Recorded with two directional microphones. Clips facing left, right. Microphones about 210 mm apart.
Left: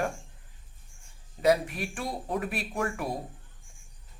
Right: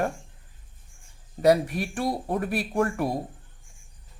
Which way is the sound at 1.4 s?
40° right (ahead or behind).